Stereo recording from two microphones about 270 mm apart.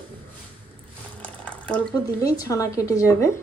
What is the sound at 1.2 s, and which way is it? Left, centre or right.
Speech, centre.